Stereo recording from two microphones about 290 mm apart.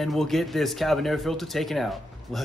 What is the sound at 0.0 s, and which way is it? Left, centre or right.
Speech, centre.